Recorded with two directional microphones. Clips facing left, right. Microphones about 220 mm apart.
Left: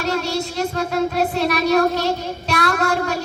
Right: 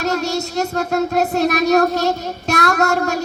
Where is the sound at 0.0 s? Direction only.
45° right (ahead or behind).